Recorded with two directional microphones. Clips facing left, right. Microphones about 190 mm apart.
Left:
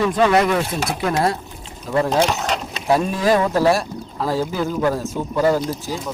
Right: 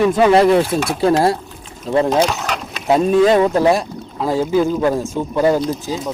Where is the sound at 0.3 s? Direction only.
30° right (ahead or behind).